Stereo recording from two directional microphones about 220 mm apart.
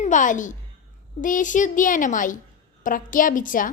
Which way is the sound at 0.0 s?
35° left (ahead or behind).